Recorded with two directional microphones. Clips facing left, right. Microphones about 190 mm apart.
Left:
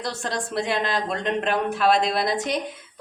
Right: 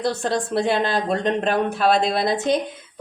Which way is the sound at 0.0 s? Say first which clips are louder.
Right 6 dB; 30° right (ahead or behind).